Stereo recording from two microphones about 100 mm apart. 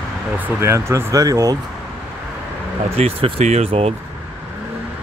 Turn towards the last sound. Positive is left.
turn(degrees=-90)